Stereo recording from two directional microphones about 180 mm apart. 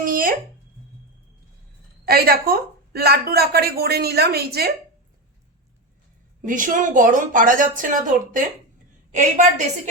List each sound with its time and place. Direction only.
0.0 s a sound: 50° right (ahead or behind)
2.0 s speech: 55° right (ahead or behind)
6.4 s a woman's voice: 45° right (ahead or behind)